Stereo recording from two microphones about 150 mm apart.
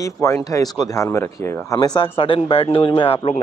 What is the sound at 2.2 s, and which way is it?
Speech, 40° left (ahead or behind).